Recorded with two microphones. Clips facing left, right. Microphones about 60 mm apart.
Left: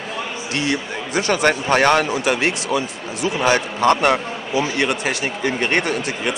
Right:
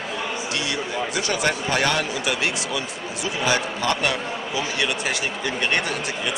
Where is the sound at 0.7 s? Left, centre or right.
Left.